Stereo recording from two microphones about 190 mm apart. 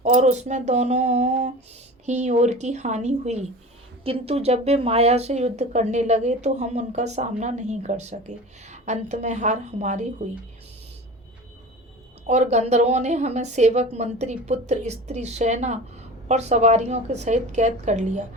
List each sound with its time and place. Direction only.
0.0 s speech: 40° right (ahead or behind)
12.2 s speech: 35° right (ahead or behind)